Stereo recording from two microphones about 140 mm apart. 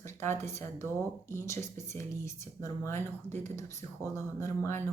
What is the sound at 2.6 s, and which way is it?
Speech, 15° left (ahead or behind).